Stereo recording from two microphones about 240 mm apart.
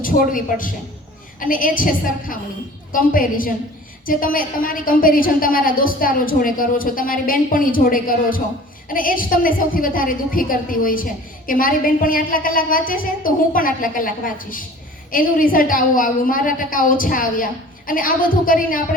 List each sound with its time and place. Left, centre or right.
0.0 s a woman's voice: left